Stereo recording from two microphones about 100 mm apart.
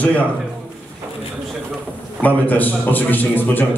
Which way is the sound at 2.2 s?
15° left (ahead or behind).